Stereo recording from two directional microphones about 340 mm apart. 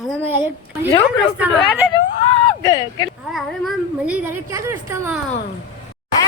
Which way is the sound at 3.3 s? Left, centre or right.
Centre.